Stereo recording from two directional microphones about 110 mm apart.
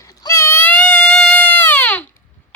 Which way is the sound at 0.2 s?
25° left (ahead or behind).